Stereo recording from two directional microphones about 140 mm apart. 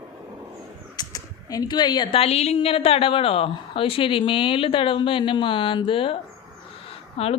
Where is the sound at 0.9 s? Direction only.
25° left (ahead or behind).